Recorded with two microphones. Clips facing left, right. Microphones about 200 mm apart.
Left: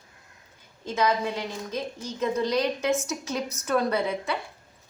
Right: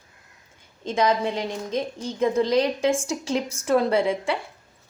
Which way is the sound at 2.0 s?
30° right (ahead or behind).